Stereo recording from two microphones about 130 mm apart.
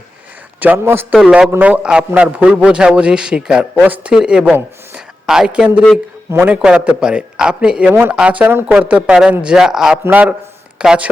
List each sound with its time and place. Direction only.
0.6 s a man's voice: 15° right (ahead or behind)
1.1 s a man's voice: 5° right (ahead or behind)